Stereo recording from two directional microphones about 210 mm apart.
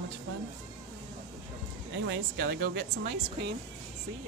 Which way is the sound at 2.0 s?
55° right (ahead or behind).